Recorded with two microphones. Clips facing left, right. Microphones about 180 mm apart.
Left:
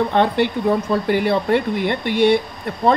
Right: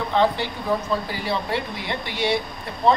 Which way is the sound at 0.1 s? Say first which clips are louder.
Left 4 dB; 60° left (ahead or behind).